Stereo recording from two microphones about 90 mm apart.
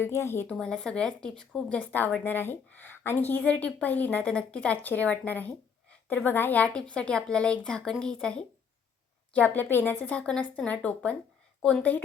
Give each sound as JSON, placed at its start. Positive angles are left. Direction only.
{"t": 0.0, "sound": "a woman's voice", "side_deg": 30}
{"t": 0.4, "sound": "a woman's voice", "side_deg": 10}
{"t": 1.9, "sound": "a woman's voice", "side_deg": 20}